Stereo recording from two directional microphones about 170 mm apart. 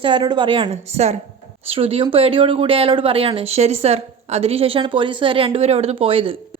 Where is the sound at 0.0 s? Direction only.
25° right (ahead or behind).